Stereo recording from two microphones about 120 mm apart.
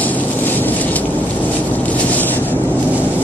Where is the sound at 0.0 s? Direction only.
15° left (ahead or behind).